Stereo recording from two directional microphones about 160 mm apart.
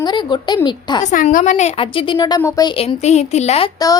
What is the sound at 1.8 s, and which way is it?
Speech, 30° left (ahead or behind).